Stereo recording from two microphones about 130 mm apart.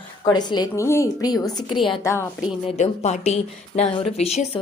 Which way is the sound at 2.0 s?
20° left (ahead or behind).